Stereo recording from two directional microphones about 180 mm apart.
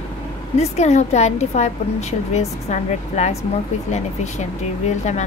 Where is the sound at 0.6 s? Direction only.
40° left (ahead or behind).